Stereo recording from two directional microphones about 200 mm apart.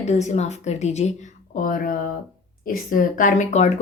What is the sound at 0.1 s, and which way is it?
A woman's voice, 35° left (ahead or behind).